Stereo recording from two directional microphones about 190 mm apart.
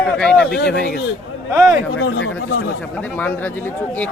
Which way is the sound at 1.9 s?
90° left.